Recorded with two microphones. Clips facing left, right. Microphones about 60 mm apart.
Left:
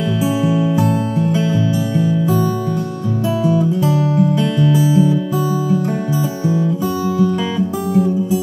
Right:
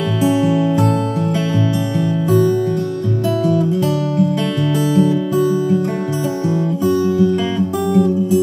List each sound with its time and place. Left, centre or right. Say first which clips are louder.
0.2 s music: right 3 dB; centre
3.4 s music: left 1 dB; centre
4.6 s music: left 1 dB; centre
7.5 s music: right 1 dB; centre